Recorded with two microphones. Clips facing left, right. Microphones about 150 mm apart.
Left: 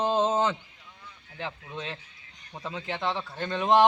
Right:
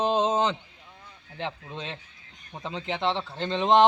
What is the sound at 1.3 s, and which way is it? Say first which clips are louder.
Speech: right 2 dB; 25° right (ahead or behind).